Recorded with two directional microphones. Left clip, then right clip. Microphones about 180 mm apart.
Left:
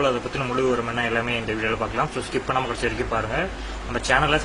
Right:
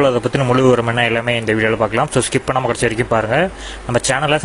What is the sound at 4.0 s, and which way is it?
Speech, 50° right (ahead or behind).